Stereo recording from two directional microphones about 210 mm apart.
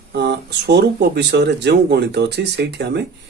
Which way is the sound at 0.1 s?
50° right (ahead or behind).